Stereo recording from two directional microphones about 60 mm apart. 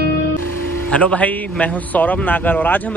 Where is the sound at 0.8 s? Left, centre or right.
Left.